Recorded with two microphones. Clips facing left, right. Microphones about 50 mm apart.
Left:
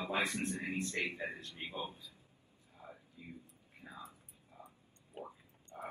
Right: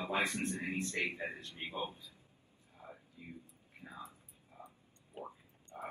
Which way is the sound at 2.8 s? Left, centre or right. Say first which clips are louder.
Even; centre.